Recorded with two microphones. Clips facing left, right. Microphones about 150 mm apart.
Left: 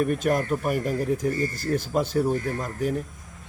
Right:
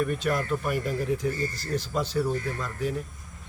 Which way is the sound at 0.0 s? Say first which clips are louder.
Left 4 dB; 45° left (ahead or behind).